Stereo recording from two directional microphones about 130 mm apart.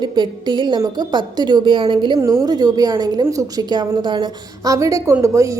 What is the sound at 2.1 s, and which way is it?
A woman's voice, 25° right (ahead or behind).